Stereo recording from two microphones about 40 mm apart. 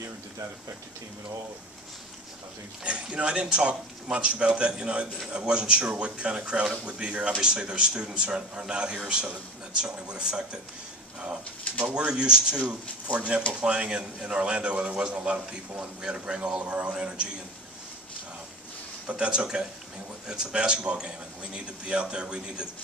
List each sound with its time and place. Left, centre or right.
2.8 s speech: right
11.8 s speech: right
19.1 s speech: right